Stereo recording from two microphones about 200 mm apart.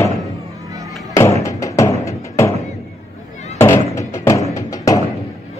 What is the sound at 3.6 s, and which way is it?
Music, 15° left (ahead or behind).